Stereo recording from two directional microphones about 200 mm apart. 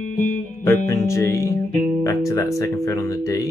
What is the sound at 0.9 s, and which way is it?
Speech, 15° left (ahead or behind).